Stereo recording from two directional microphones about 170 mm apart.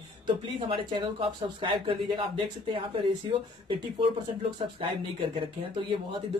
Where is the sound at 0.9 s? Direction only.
30° right (ahead or behind).